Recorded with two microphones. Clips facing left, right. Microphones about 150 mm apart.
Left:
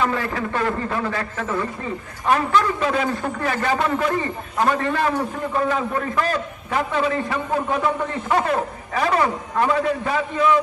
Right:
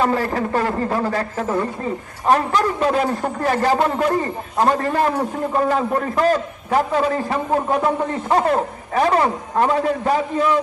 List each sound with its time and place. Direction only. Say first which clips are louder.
0.0 s a man's voice: right 4 dB; 35° right (ahead or behind)